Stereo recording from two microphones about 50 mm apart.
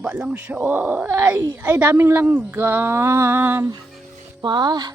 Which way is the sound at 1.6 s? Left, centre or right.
Right.